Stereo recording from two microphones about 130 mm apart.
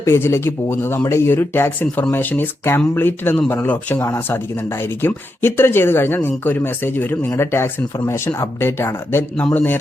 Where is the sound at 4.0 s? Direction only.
25° left (ahead or behind).